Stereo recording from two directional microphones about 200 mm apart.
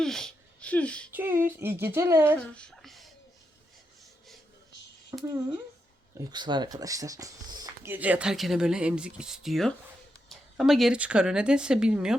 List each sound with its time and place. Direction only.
0.0 s speech: centre (ahead or behind)
1.1 s a sound: 10° right (ahead or behind)
2.4 s speech: 5° left (ahead or behind)
5.1 s speech: 15° right (ahead or behind)